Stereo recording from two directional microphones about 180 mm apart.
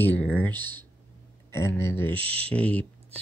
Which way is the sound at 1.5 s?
15° left (ahead or behind).